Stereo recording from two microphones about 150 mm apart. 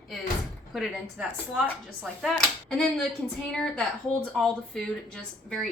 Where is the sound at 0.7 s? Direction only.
Centre (ahead or behind).